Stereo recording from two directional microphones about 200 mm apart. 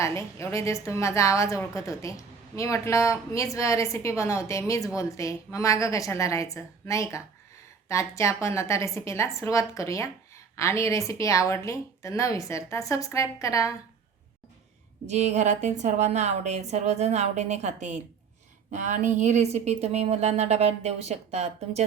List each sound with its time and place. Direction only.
0.0 s speech: 15° left (ahead or behind)
15.0 s a woman's voice: 35° right (ahead or behind)